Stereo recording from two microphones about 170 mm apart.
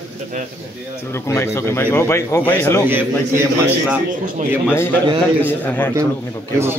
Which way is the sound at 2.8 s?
15° right (ahead or behind).